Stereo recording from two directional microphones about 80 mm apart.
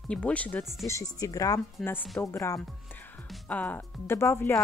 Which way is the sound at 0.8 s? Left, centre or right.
Left.